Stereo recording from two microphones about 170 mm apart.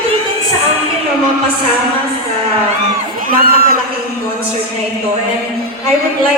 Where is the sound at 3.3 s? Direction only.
60° right (ahead or behind).